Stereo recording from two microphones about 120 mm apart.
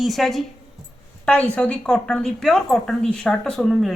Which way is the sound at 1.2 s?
10° left (ahead or behind).